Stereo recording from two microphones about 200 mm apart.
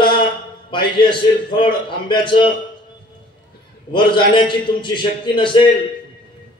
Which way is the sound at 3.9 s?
25° left (ahead or behind).